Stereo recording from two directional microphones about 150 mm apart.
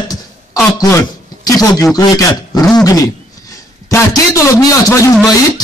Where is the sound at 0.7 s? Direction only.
20° left (ahead or behind).